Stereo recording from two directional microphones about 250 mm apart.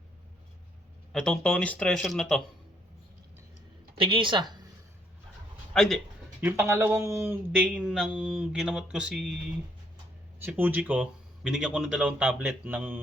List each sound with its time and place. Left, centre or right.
1.1 s speech: centre
4.0 s a woman's voice: right
5.7 s speech: centre
6.4 s speech: centre
10.4 s speech: centre